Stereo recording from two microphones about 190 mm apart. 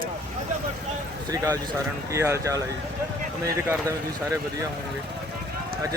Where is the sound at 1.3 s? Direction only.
15° right (ahead or behind).